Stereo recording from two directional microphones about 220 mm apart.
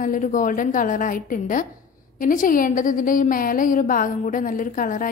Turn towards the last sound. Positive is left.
turn(degrees=40)  # may be behind; listen again after turning